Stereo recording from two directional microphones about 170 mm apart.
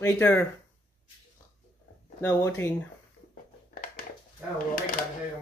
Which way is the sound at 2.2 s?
15° left (ahead or behind).